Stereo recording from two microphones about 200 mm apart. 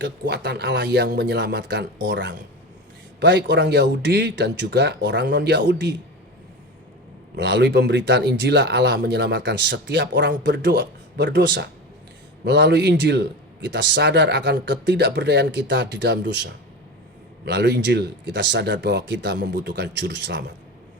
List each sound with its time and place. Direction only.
0.0 s a man's voice: 60° right (ahead or behind)
7.3 s a man's voice: 60° right (ahead or behind)